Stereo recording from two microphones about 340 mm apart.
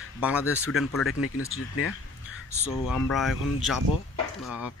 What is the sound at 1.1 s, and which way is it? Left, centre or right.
Speech, left.